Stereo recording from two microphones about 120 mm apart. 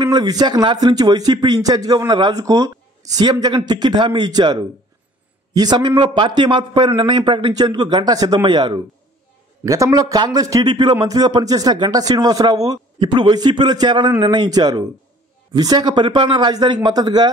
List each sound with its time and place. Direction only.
0.0 s speech: 35° right (ahead or behind)
9.7 s speech: 30° right (ahead or behind)